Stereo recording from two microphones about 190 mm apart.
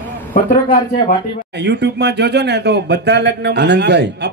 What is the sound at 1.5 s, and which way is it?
Speech, 65° right (ahead or behind).